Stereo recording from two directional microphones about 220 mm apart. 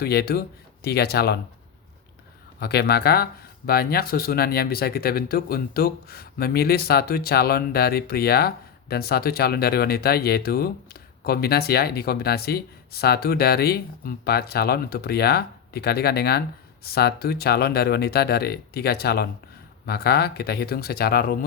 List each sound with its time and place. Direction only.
0.0 s speech: 45° left (ahead or behind)
2.6 s speech: 45° left (ahead or behind)